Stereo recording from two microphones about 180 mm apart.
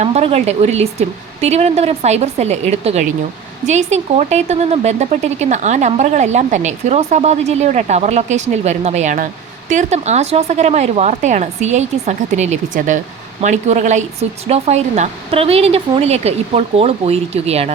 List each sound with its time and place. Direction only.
0.0 s speech: 35° right (ahead or behind)